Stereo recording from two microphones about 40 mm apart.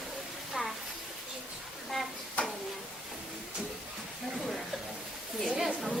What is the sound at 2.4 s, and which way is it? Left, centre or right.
Stir, left.